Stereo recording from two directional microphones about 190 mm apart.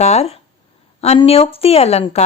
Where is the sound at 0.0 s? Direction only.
35° left (ahead or behind).